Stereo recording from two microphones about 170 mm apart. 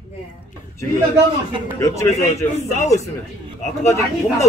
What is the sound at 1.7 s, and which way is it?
A man's voice, 20° left (ahead or behind).